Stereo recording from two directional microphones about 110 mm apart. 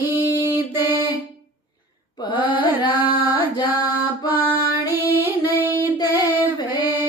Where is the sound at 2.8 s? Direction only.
15° right (ahead or behind).